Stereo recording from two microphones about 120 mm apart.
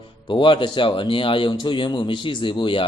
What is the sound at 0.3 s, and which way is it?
A man's voice, 45° left (ahead or behind).